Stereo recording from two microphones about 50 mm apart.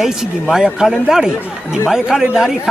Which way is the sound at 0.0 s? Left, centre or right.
Centre.